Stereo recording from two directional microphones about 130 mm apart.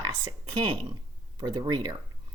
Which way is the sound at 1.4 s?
30° right (ahead or behind).